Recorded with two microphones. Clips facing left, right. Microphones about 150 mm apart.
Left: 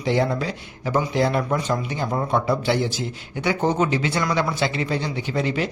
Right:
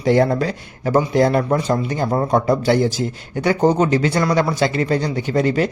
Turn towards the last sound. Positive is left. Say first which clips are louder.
# right 6 dB
turn(degrees=-45)  # may be behind; listen again after turning